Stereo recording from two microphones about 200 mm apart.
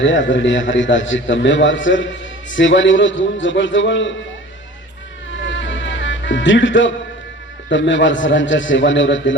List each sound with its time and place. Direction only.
0.0 s a man's voice: 70° left (ahead or behind)
5.4 s music: 65° left (ahead or behind)
7.7 s a man's voice: 65° left (ahead or behind)